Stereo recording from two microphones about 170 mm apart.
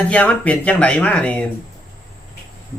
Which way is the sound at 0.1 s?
10° left (ahead or behind).